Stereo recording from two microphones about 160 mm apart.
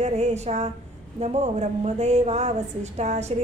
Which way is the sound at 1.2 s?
45° right (ahead or behind).